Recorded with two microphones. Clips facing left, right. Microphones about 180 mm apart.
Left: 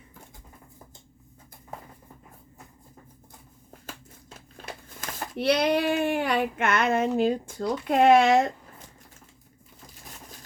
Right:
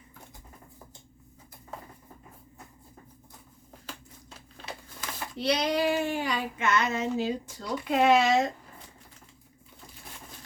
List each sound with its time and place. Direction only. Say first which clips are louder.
4.4 s speech: left 1 dB; 50° left (ahead or behind)